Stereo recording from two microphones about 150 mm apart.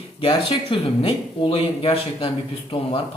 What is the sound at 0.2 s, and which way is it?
Speech, 35° left (ahead or behind).